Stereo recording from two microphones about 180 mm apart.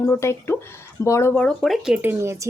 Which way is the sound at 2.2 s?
15° right (ahead or behind).